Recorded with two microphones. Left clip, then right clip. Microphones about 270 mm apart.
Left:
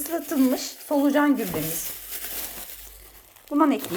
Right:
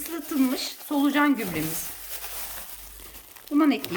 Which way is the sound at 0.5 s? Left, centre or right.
Centre.